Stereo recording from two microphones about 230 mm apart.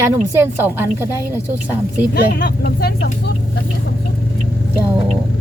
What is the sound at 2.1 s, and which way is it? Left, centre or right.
Speech, left.